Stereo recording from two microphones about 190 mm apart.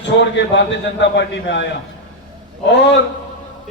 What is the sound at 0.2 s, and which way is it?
A man's voice, 70° left (ahead or behind).